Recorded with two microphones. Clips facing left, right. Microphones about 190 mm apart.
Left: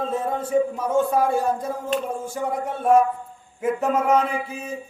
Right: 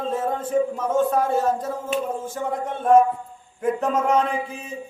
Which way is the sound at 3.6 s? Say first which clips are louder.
Even; 5° left (ahead or behind).